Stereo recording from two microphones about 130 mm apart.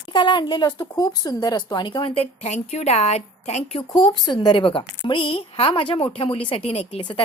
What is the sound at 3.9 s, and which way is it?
A woman's voice, 35° left (ahead or behind).